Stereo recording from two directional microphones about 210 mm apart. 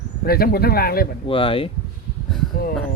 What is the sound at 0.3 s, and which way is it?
Speech, 45° left (ahead or behind).